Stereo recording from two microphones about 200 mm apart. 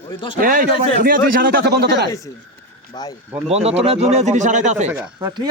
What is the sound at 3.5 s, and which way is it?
Speech, 30° right (ahead or behind).